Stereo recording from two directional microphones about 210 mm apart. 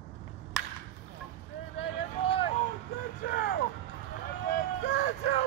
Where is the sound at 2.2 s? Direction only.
25° left (ahead or behind).